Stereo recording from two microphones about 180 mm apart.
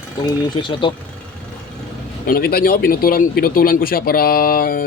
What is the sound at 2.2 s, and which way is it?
Speech, 55° left (ahead or behind).